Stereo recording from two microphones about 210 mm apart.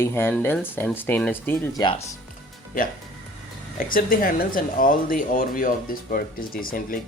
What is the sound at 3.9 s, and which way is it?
Speech, 40° left (ahead or behind).